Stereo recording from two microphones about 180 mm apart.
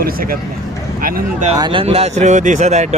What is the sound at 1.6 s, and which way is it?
Speech, 25° right (ahead or behind).